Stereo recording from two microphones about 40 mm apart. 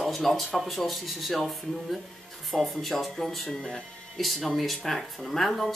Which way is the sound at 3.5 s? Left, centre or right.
Centre.